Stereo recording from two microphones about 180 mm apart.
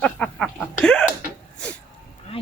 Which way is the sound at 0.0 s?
5° left (ahead or behind).